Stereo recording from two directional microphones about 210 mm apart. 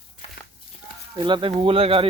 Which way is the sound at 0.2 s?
30° left (ahead or behind).